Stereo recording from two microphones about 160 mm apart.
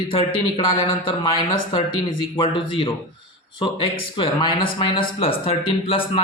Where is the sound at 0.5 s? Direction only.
30° left (ahead or behind).